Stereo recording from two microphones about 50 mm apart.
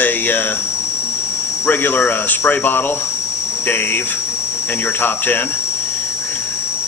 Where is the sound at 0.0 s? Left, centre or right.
Left.